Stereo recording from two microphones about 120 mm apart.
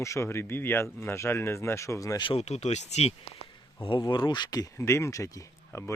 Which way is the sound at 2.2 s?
60° left (ahead or behind).